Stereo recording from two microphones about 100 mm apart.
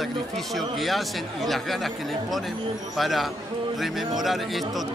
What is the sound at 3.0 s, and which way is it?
Speech, centre (ahead or behind).